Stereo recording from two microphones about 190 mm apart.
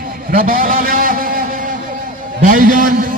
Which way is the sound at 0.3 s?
50° right (ahead or behind).